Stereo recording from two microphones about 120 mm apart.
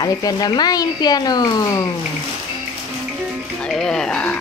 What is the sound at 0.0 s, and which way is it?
Speech, 35° left (ahead or behind).